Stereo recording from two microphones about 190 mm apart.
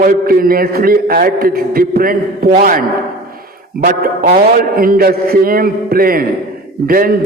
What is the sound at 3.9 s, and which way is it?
A man's voice, 50° right (ahead or behind).